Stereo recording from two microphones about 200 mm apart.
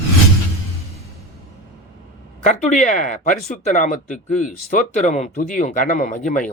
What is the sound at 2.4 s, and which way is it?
Speech, 40° left (ahead or behind).